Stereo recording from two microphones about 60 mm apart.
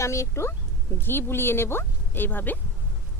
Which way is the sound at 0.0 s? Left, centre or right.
Left.